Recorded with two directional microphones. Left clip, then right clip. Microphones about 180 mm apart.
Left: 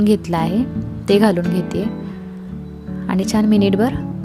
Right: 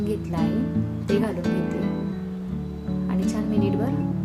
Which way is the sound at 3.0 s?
60° left (ahead or behind).